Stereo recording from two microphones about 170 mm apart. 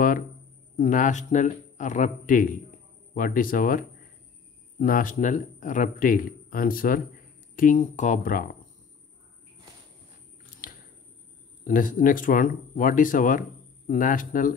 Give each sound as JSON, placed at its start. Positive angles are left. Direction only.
{"t": 0.7, "sound": "speech", "side_deg": 50}
{"t": 11.6, "sound": "speech", "side_deg": 55}